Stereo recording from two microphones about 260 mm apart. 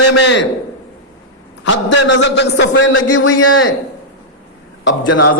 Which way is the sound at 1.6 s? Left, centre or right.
Left.